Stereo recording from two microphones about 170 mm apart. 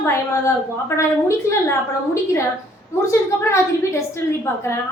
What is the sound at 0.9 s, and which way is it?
A woman's voice, 15° left (ahead or behind).